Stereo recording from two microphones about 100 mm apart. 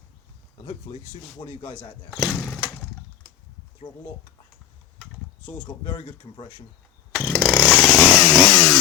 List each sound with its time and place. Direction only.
1.4 s speech: 55° left (ahead or behind)
2.1 s speech: 5° right (ahead or behind)
5.8 s speech: 50° left (ahead or behind)
7.3 s chainsaw: centre (ahead or behind)